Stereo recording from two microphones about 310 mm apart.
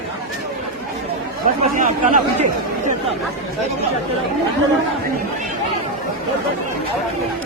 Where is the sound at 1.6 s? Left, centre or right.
Right.